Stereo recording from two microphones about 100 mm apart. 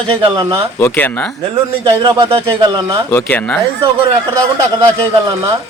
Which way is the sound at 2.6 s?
50° right (ahead or behind).